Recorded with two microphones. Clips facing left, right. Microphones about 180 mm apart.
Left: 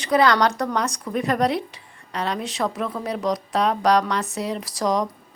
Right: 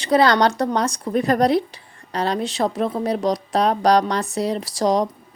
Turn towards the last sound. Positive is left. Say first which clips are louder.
# right 4 dB
turn(degrees=-30)  # may be behind; listen again after turning